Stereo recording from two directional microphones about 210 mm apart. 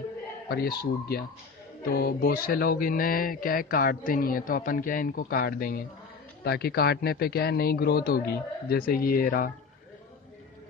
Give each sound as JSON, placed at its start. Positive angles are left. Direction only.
{"t": 0.5, "sound": "speech", "side_deg": 45}